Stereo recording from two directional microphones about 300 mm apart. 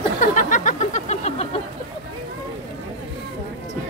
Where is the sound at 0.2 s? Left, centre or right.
Left.